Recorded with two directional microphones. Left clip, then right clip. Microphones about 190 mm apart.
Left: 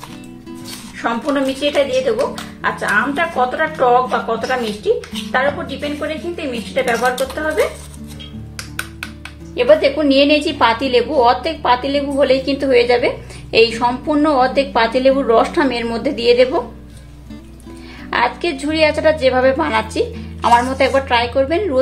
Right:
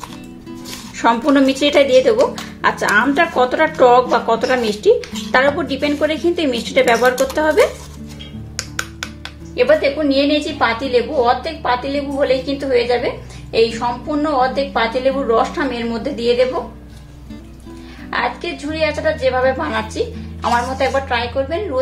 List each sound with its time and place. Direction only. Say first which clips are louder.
0.9 s speech: right 5 dB; 35° right (ahead or behind)
9.6 s a woman's voice: left 2 dB; 20° left (ahead or behind)
18.1 s a woman's voice: left 3 dB; 25° left (ahead or behind)